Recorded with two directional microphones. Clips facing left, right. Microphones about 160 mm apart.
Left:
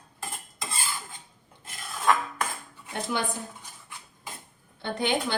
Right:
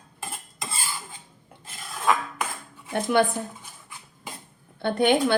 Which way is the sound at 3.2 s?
60° right (ahead or behind).